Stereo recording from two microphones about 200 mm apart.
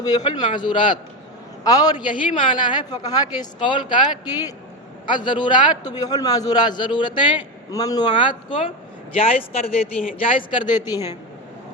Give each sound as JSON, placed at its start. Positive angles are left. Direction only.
{"t": 0.3, "sound": "a man's voice", "side_deg": 25}